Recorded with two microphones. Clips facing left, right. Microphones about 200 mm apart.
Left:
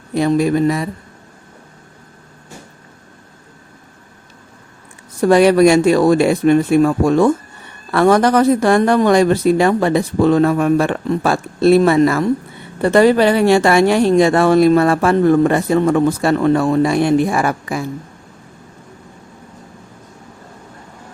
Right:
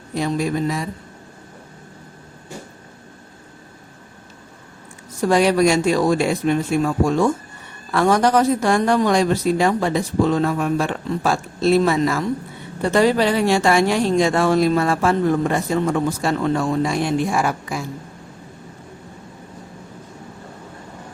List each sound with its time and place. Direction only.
0.1 s speech: 60° left (ahead or behind)
5.2 s speech: 60° left (ahead or behind)